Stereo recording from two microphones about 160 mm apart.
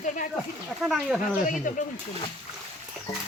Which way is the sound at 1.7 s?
55° left (ahead or behind).